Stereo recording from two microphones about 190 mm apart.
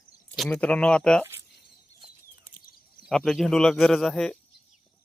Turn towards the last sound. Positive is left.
turn(degrees=0)  # may be behind; listen again after turning